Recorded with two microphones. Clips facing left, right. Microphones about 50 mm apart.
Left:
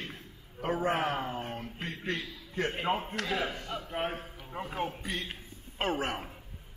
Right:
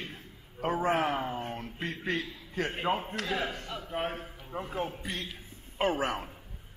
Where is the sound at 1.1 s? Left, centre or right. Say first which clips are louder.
Right 1 dB; centre.